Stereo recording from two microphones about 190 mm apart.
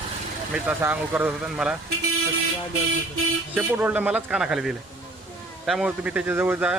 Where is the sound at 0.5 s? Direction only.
10° right (ahead or behind).